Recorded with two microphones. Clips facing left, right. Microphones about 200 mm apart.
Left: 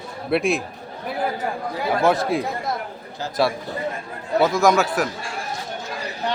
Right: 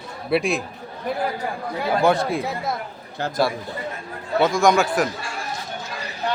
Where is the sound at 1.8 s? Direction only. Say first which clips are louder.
Even; centre (ahead or behind).